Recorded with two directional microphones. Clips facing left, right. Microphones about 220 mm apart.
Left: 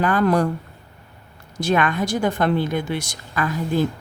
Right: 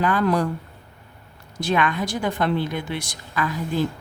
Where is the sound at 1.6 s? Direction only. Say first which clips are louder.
Left 2 dB; 45° left (ahead or behind).